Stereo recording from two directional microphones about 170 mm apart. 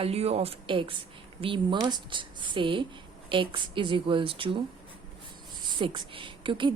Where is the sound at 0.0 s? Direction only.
35° right (ahead or behind).